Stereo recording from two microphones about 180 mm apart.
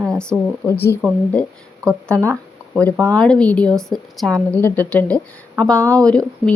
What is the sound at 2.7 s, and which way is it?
A woman's voice, 5° left (ahead or behind).